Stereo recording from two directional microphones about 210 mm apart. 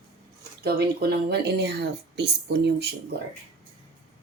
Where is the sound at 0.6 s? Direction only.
50° right (ahead or behind).